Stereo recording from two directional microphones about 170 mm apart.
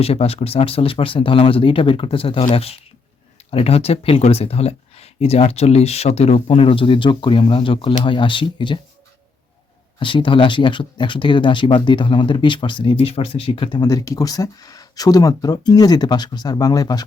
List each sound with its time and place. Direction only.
0.0 s speech: 35° left (ahead or behind)
10.0 s speech: 30° left (ahead or behind)